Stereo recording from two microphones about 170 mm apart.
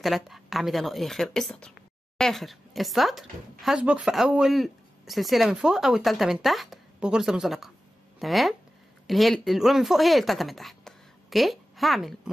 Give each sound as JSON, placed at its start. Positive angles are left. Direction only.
{"t": 0.0, "sound": "speech", "side_deg": 0}